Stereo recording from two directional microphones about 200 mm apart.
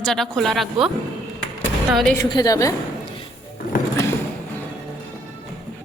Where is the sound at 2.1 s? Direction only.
20° left (ahead or behind).